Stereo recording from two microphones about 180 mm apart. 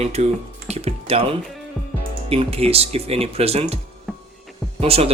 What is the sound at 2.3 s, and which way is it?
Speech, 35° right (ahead or behind).